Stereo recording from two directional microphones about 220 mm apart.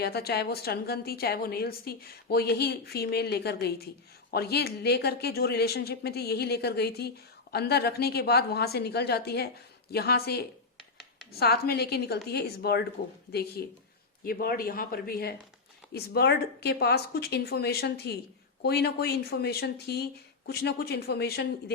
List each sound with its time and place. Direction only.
0.0 s a woman's voice: 45° left (ahead or behind)